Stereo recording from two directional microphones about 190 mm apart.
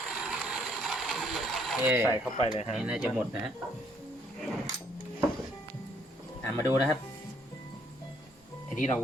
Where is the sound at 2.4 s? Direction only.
30° left (ahead or behind).